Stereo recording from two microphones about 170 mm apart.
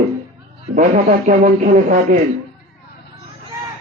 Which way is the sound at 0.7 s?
50° right (ahead or behind).